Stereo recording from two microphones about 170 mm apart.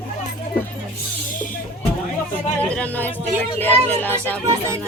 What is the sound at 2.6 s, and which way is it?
Speech, 10° left (ahead or behind).